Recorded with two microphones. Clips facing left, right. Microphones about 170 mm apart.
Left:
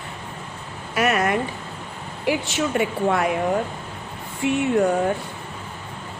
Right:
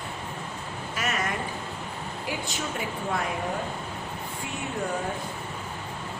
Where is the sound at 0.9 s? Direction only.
65° left (ahead or behind).